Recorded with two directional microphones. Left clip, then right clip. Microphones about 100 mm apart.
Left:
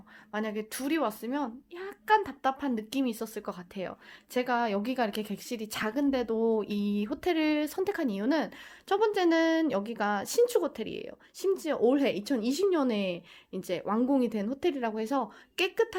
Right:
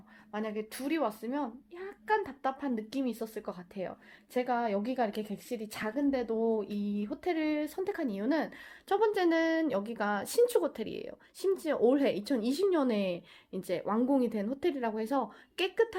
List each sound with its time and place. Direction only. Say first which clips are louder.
0.3 s a woman's voice: left 3 dB; 50° left (ahead or behind)
6.6 s speech: left 4 dB; 75° left (ahead or behind); by 8.5 s 45° left (ahead or behind)
8.9 s speech: left 2 dB; 30° left (ahead or behind)